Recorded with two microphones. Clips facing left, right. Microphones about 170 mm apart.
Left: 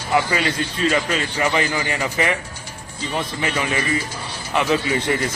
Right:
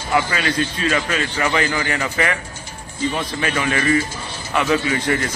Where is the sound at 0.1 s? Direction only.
20° left (ahead or behind).